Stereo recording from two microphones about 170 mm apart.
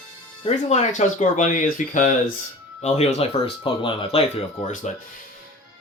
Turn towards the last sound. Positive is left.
turn(degrees=50)  # may be behind; listen again after turning